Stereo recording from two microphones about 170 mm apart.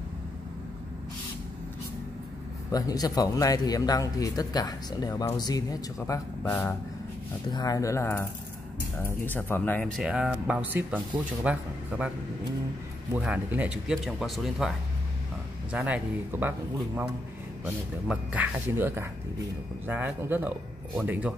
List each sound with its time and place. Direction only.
2.7 s a man's voice: 20° left (ahead or behind); by 12.1 s 10° right (ahead or behind)
13.1 s speech: 10° right (ahead or behind)
15.7 s a man's voice: 10° right (ahead or behind)